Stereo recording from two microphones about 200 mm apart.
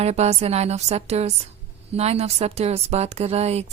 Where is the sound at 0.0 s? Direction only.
35° right (ahead or behind).